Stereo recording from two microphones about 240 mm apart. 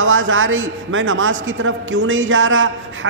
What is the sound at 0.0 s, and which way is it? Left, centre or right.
A man's voice, right.